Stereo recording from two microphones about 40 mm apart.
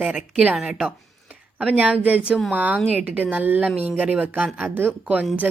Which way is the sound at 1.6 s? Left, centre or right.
Right.